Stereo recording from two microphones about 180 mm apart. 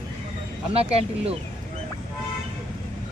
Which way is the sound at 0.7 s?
35° right (ahead or behind).